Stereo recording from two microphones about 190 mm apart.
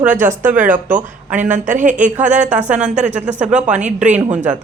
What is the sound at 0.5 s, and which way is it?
Speech, 45° right (ahead or behind).